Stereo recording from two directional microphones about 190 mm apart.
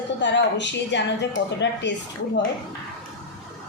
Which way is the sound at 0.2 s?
70° left (ahead or behind).